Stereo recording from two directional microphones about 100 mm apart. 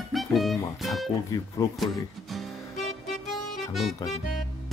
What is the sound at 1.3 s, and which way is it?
Speech, 40° left (ahead or behind).